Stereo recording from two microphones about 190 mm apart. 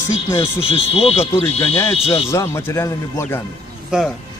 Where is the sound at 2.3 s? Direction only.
15° left (ahead or behind).